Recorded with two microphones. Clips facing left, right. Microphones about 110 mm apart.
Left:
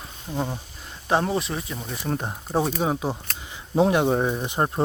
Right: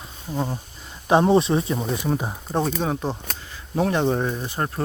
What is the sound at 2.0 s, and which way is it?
Speech, 5° right (ahead or behind).